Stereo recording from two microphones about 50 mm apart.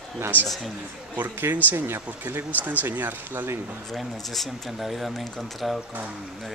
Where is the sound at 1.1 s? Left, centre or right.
Right.